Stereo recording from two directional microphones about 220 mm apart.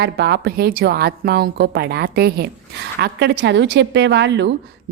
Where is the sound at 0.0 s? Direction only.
50° right (ahead or behind).